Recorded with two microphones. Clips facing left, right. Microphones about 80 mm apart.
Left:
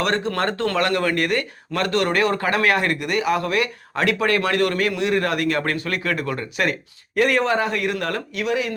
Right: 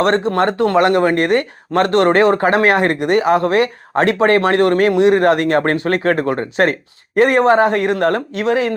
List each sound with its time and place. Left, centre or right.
0.0 s speech: right